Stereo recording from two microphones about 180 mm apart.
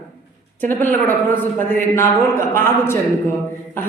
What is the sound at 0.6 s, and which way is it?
Speech, 10° left (ahead or behind).